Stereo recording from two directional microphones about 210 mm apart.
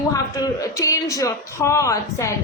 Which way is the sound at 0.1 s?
15° left (ahead or behind).